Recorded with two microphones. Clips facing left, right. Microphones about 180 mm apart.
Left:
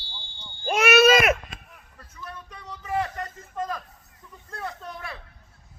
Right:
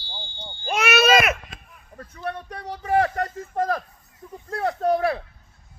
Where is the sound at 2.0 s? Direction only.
65° right (ahead or behind).